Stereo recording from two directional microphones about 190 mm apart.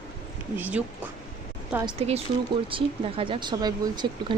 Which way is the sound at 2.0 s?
30° right (ahead or behind).